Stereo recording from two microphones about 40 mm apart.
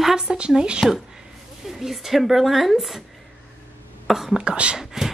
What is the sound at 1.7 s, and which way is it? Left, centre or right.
Speech, centre.